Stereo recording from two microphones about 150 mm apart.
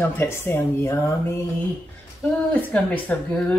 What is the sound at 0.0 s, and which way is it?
Speech, 15° left (ahead or behind).